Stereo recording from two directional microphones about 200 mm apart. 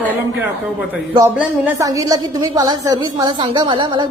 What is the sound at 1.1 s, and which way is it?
A man's voice, 20° right (ahead or behind).